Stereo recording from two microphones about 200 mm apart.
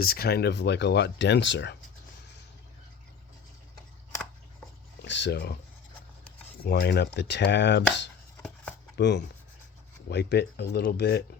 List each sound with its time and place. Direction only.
0.0 s speech: 50° left (ahead or behind)
5.0 s a sound: 65° left (ahead or behind)
6.7 s speech: 55° left (ahead or behind)
8.4 s chopping: 5° left (ahead or behind)
9.0 s speech: 60° left (ahead or behind)